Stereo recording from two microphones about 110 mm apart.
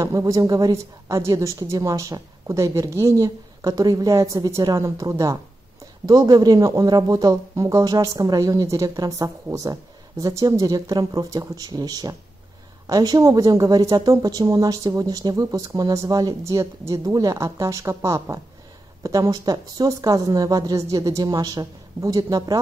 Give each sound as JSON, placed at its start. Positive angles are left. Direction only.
{"t": 0.0, "sound": "a woman's voice", "side_deg": -30}